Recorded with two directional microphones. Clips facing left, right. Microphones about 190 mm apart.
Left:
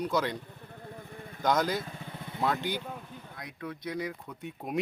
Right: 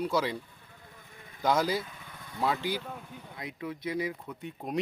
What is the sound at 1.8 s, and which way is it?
Speech, 45° left (ahead or behind).